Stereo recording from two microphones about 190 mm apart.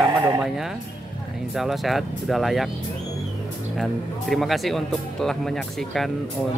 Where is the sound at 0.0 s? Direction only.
20° right (ahead or behind).